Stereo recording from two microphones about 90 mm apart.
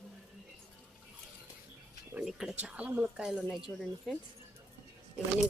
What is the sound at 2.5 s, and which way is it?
Speech, 15° right (ahead or behind).